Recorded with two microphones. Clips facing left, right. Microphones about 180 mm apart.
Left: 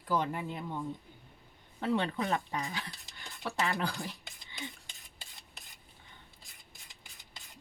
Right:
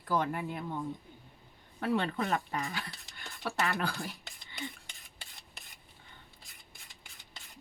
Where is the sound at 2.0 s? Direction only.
20° left (ahead or behind).